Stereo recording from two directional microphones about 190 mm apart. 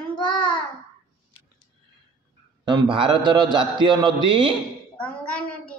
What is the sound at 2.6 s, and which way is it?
A man's voice, 25° right (ahead or behind).